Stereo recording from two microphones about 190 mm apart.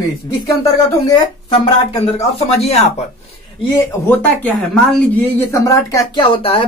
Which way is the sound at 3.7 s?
10° left (ahead or behind).